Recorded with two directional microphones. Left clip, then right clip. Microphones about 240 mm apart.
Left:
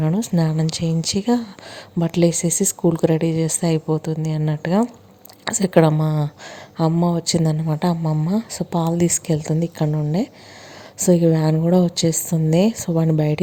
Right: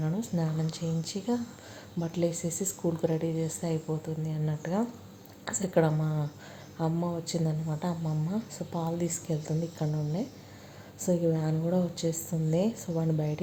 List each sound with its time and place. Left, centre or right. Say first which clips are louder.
0.0 s speech: left 11 dB; left